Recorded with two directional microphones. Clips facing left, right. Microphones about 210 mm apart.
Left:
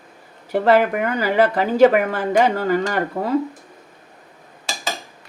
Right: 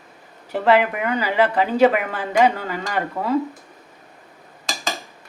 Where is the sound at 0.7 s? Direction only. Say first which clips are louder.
Left 1 dB; 45° left (ahead or behind).